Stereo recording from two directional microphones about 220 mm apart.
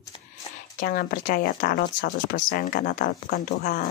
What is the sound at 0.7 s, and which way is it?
Speech, 40° left (ahead or behind).